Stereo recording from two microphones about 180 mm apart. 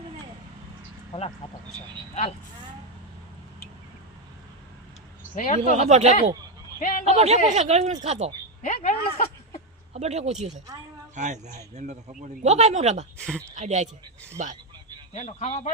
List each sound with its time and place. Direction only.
5.3 s speech: 45° left (ahead or behind)
5.7 s a man's voice: 40° right (ahead or behind)
6.7 s a man's voice: 50° left (ahead or behind)
7.0 s a man's voice: 35° right (ahead or behind)
8.6 s speech: 50° left (ahead or behind)
9.9 s a man's voice: 35° right (ahead or behind)
13.1 s speech: 5° left (ahead or behind)
13.6 s a man's voice: 40° right (ahead or behind)
15.1 s speech: 40° left (ahead or behind)